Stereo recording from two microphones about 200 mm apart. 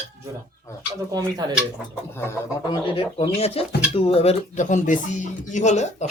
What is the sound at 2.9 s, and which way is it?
Speech, 30° left (ahead or behind).